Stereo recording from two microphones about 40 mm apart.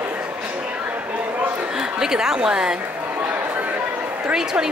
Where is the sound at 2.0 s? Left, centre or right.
Centre.